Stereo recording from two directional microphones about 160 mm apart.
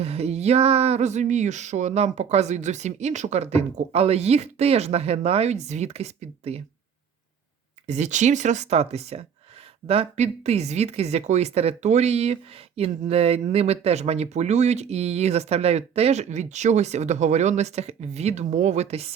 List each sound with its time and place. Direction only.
0.0 s speech: 40° right (ahead or behind)
7.9 s speech: 45° right (ahead or behind)